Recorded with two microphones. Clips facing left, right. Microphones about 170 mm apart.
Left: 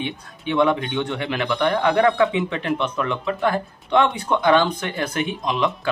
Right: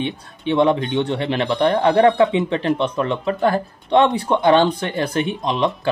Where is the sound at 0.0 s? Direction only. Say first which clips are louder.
Right 4 dB; 30° right (ahead or behind).